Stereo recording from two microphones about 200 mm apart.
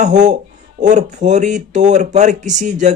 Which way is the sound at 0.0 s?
35° right (ahead or behind).